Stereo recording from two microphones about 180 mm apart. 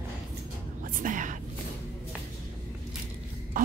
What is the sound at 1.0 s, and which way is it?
Whispering, 45° right (ahead or behind).